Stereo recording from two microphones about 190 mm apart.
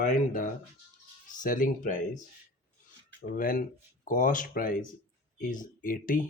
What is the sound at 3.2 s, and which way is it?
Speech, 45° left (ahead or behind).